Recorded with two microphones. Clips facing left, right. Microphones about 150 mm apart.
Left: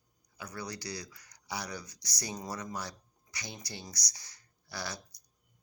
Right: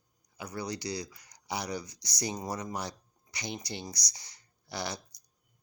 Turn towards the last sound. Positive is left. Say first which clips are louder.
# right 4 dB
turn(degrees=-20)  # may be behind; listen again after turning